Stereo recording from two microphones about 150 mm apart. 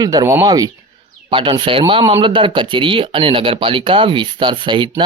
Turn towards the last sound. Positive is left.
turn(degrees=-30)  # may be behind; listen again after turning